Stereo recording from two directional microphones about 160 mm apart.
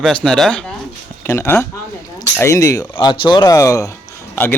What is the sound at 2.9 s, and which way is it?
Speech, 35° left (ahead or behind).